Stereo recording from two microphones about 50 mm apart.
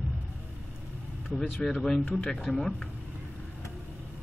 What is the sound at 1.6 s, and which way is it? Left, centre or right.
Speech, centre.